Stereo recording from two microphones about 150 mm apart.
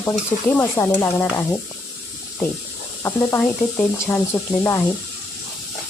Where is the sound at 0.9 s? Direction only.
20° left (ahead or behind).